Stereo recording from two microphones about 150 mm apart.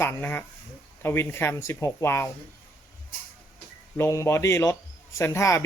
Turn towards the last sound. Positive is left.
turn(degrees=20)  # may be behind; listen again after turning